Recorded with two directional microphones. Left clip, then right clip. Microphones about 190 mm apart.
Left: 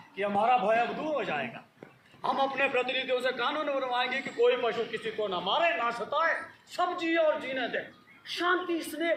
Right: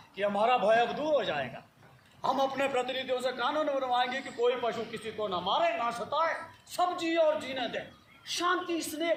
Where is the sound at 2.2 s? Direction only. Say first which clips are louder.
Left 1 dB; 65° right (ahead or behind).